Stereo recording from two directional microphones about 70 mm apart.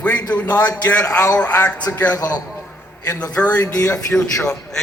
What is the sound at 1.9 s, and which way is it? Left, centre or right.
Speech, left.